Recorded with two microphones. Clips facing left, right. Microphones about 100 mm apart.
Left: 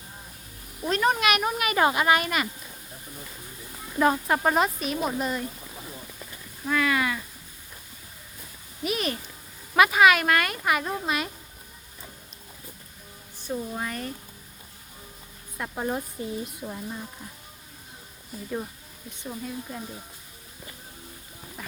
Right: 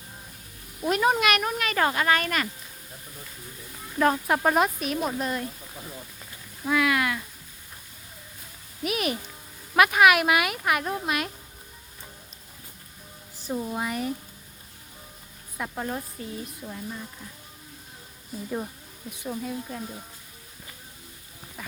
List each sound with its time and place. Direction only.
0.8 s speech: 10° right (ahead or behind)
1.2 s speech: 5° left (ahead or behind)
3.9 s speech: 5° left (ahead or behind)
6.7 s a sound: 5° right (ahead or behind)
8.8 s speech: 5° right (ahead or behind)
13.5 s speech: 15° right (ahead or behind)
15.5 s speech: centre (ahead or behind)
15.8 s speech: 15° left (ahead or behind)
19.1 s speech: 5° right (ahead or behind)